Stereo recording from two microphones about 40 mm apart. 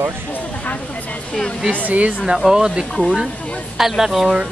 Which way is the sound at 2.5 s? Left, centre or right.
Centre.